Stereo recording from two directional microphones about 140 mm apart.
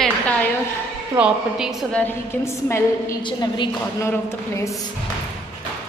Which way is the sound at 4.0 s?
20° left (ahead or behind).